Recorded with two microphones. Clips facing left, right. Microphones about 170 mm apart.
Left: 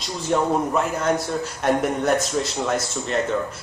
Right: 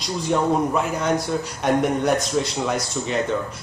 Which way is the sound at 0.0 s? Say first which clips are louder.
Right 1 dB; centre (ahead or behind).